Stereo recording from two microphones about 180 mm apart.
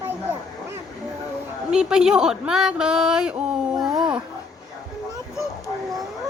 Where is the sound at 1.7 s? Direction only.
5° right (ahead or behind).